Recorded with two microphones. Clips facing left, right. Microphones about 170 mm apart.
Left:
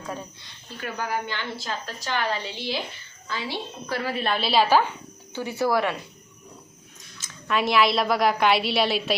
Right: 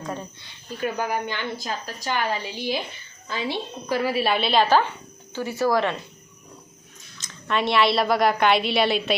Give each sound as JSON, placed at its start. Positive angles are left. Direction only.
{"t": 0.1, "sound": "a woman's voice", "side_deg": 0}
{"t": 0.8, "sound": "a woman's voice", "side_deg": -15}
{"t": 7.2, "sound": "a woman's voice", "side_deg": 5}